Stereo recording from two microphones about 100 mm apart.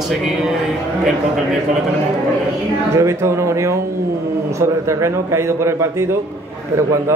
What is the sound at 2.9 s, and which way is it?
A man's voice, 30° right (ahead or behind).